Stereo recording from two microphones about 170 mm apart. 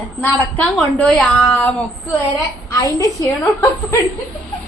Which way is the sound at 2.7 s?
20° left (ahead or behind).